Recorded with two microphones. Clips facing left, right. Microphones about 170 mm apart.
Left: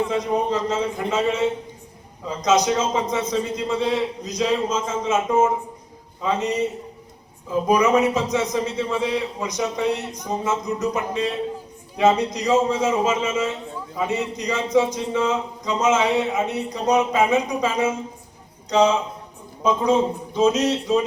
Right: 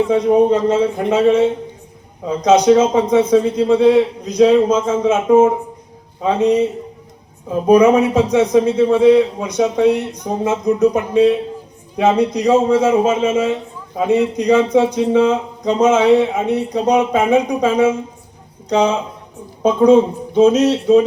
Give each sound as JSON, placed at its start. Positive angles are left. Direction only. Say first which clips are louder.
{"t": 0.1, "sound": "a man's voice", "louder": "right 10 dB", "side_deg": -60}